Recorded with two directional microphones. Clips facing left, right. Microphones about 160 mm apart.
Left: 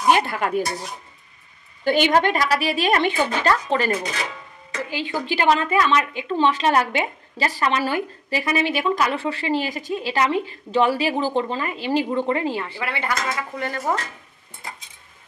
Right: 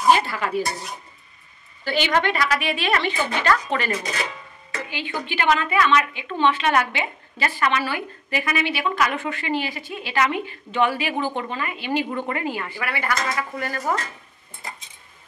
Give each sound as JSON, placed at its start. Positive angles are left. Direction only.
{"t": 0.3, "sound": "a woman's voice", "side_deg": 50}
{"t": 1.9, "sound": "a woman's voice", "side_deg": 50}
{"t": 3.4, "sound": "speech", "side_deg": 30}
{"t": 4.8, "sound": "a woman's voice", "side_deg": 40}